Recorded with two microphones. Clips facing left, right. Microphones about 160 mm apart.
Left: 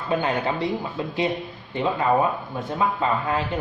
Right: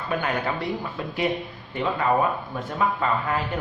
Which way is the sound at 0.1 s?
25° left (ahead or behind).